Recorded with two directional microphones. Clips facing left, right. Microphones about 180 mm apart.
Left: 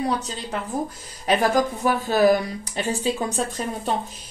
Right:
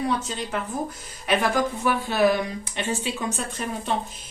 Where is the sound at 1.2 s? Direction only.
40° left (ahead or behind).